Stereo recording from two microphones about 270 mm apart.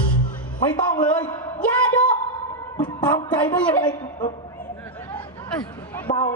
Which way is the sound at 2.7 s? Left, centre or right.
Centre.